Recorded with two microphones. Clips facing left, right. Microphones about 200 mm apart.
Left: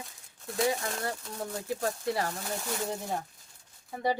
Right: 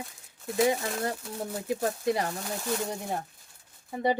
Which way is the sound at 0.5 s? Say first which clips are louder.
Right 4 dB; 20° right (ahead or behind).